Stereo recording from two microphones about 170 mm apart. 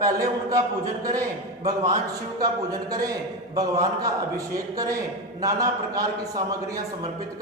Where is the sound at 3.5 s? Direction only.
20° right (ahead or behind).